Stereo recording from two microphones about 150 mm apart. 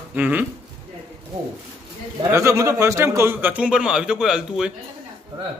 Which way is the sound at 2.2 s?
20° right (ahead or behind).